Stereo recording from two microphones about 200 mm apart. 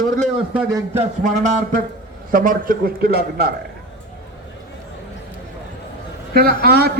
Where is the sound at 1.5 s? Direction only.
40° right (ahead or behind).